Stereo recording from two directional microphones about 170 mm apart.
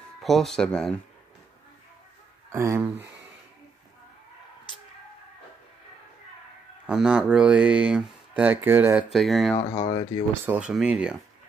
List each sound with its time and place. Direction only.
0.2 s speech: centre (ahead or behind)
2.5 s speech: 15° right (ahead or behind)
6.9 s speech: 5° right (ahead or behind)
9.1 s speech: centre (ahead or behind)
9.6 s speech: 35° left (ahead or behind)
10.4 s speech: 5° right (ahead or behind)